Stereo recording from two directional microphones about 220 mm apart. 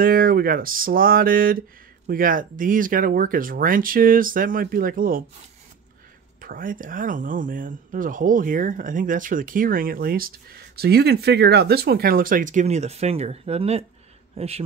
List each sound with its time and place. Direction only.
0.0 s speech: 40° right (ahead or behind)
6.4 s a man's voice: 40° right (ahead or behind)